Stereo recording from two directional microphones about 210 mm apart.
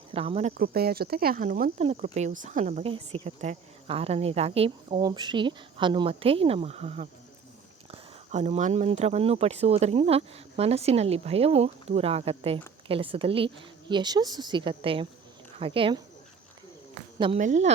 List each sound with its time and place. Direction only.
0.1 s speech: 25° right (ahead or behind)
0.5 s speech: 45° right (ahead or behind); by 16.0 s 25° right (ahead or behind)
17.2 s a woman's voice: 25° right (ahead or behind)